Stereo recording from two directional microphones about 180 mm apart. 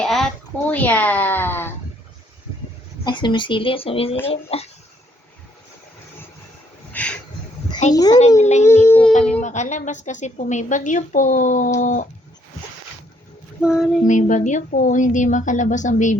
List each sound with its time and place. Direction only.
0.0 s a sound: centre (ahead or behind)
0.7 s speech: 10° left (ahead or behind)
3.0 s speech: 25° left (ahead or behind)
6.9 s speech: 5° left (ahead or behind)
7.9 s speech: 20° left (ahead or behind)
8.4 s speech: 40° left (ahead or behind)
8.6 s speech: 15° left (ahead or behind)
9.4 s a woman's voice: 40° left (ahead or behind)
13.6 s female singing: 5° right (ahead or behind)
14.0 s a woman's voice: 45° left (ahead or behind)